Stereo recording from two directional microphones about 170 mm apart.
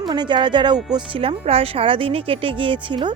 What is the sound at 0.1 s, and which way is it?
Speech, 25° right (ahead or behind).